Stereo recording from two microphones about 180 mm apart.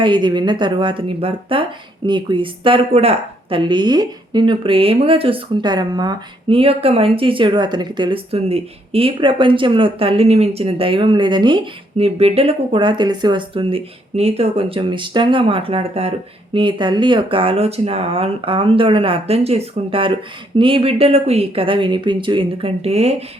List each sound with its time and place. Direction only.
0.0 s speech: 25° right (ahead or behind)